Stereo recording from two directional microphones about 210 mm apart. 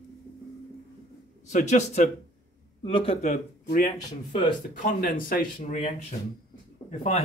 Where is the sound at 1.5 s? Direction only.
35° left (ahead or behind).